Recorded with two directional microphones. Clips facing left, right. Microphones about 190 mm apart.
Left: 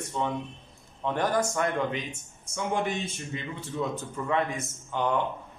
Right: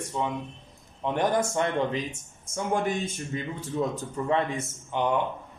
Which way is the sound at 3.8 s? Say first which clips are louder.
Right 2 dB; 40° right (ahead or behind).